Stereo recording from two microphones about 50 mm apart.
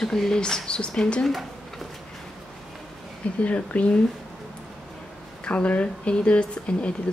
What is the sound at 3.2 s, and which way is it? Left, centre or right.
Speech, left.